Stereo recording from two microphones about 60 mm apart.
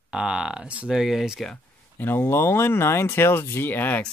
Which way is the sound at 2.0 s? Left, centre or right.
Left.